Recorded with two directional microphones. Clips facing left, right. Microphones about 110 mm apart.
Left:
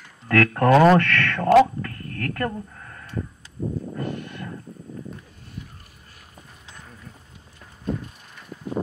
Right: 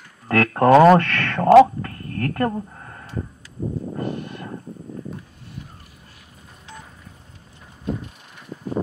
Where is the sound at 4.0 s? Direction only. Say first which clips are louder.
Right 3 dB; 30° right (ahead or behind).